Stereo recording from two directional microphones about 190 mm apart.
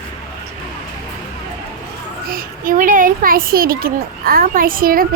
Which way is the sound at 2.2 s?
45° right (ahead or behind).